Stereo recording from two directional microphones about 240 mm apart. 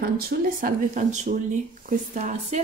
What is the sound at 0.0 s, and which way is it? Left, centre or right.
Speech, right.